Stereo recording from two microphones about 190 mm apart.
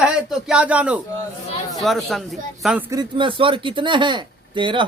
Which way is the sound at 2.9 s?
25° right (ahead or behind).